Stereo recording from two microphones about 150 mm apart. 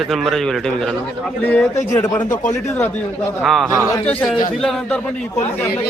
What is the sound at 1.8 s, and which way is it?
Speech, 25° left (ahead or behind).